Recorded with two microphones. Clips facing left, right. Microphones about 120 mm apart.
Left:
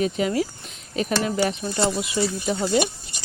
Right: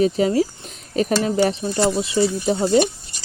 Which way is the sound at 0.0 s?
35° right (ahead or behind).